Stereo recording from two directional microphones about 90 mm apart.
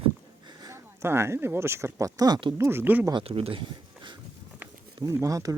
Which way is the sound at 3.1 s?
75° right (ahead or behind).